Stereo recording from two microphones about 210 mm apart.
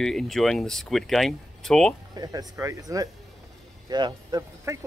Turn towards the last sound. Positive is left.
turn(degrees=-15)  # may be behind; listen again after turning